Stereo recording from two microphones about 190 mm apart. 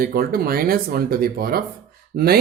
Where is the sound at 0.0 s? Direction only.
50° right (ahead or behind).